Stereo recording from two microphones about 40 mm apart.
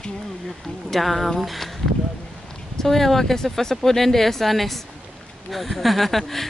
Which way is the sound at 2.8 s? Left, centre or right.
Centre.